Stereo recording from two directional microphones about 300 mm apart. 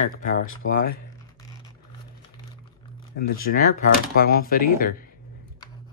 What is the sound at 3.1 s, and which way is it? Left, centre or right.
Speech, left.